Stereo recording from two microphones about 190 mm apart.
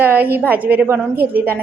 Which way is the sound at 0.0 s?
10° right (ahead or behind).